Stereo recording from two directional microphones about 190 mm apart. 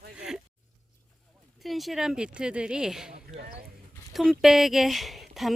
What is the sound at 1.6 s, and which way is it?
Speech, centre (ahead or behind).